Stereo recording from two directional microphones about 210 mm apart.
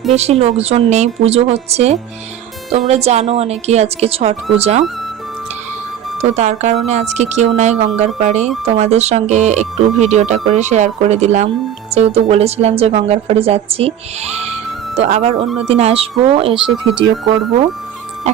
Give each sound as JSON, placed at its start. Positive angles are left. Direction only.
{"t": 0.1, "sound": "a woman's voice", "side_deg": -30}
{"t": 6.2, "sound": "a woman's voice", "side_deg": -35}